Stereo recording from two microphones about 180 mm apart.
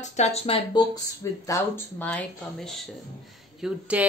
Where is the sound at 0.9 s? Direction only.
20° left (ahead or behind).